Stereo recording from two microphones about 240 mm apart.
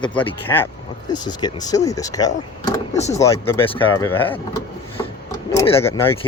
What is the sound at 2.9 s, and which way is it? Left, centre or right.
Speech, left.